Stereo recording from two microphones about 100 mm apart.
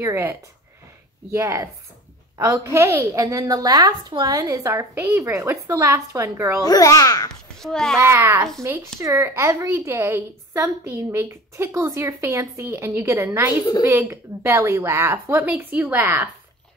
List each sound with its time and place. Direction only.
0.0 s a woman's voice: 25° right (ahead or behind)
6.6 s a child's voice: 40° left (ahead or behind)
7.5 s a child's voice: 5° left (ahead or behind)
8.0 s a woman's voice: 25° right (ahead or behind)
13.5 s a child's voice: 40° left (ahead or behind)
13.8 s a woman's voice: 25° right (ahead or behind)